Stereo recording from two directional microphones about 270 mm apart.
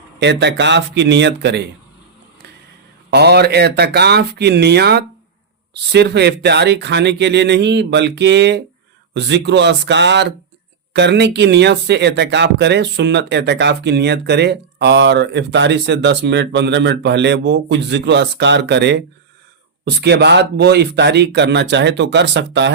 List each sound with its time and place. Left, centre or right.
0.2 s speech: right
3.1 s speech: right